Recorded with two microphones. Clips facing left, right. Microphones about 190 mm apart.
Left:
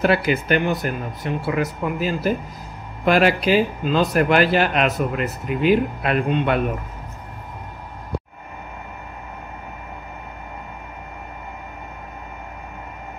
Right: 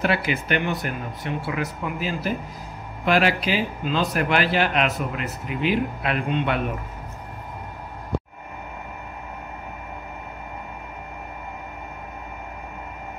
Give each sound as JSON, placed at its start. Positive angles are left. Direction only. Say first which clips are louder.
{"t": 0.0, "sound": "speech", "louder": "left 5 dB", "side_deg": 40}